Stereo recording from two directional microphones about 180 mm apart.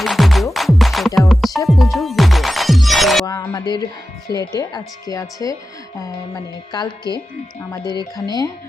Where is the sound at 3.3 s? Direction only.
20° left (ahead or behind).